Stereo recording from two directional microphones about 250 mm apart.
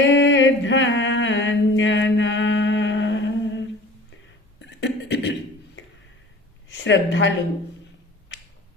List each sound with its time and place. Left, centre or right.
0.1 s a sound: left
4.8 s beatboxing: left
6.7 s a woman's voice: left